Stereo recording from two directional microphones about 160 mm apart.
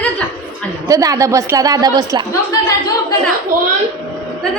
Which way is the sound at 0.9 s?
20° right (ahead or behind).